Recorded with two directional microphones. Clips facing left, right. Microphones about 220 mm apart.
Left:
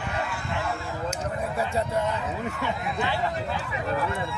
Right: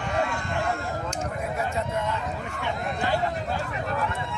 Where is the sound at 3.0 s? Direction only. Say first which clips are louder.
Right 2 dB; 45° right (ahead or behind).